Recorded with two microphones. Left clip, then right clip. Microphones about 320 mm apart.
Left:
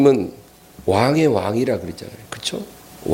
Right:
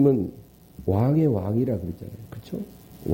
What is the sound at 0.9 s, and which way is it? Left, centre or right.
Speech, centre.